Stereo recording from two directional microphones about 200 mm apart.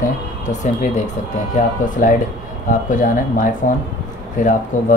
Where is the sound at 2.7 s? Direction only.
40° left (ahead or behind).